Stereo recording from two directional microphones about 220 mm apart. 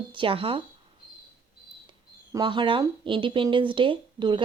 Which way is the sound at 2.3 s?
20° right (ahead or behind).